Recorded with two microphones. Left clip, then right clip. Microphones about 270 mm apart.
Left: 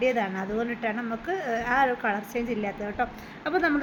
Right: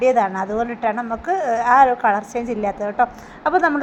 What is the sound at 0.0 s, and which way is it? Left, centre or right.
A woman's voice, centre.